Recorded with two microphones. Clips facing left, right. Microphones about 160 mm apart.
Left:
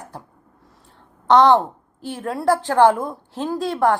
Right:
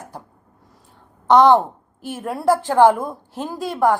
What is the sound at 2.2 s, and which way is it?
Speech, 20° right (ahead or behind).